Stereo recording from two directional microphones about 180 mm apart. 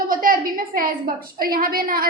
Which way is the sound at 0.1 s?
50° right (ahead or behind).